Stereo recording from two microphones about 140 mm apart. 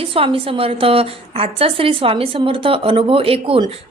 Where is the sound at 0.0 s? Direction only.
40° right (ahead or behind).